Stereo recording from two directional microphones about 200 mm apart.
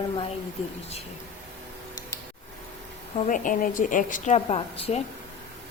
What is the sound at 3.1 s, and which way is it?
A woman's voice, 35° left (ahead or behind).